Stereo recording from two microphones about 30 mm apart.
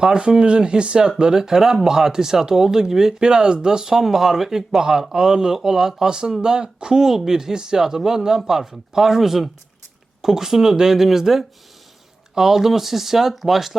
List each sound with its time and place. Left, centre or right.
0.0 s speech: right
1.2 s speech: centre
3.2 s speech: right; by 13.7 s centre